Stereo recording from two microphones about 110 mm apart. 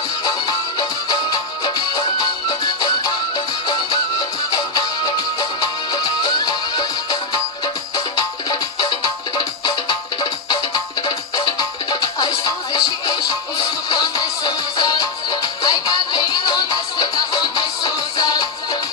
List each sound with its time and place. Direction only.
0.2 s music: 40° left (ahead or behind)
8.5 s music: 45° left (ahead or behind)